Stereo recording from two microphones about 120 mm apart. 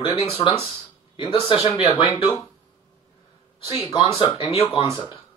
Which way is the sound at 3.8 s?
50° left (ahead or behind).